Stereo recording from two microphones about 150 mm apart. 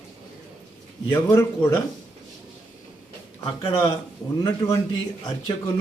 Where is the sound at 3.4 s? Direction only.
40° left (ahead or behind).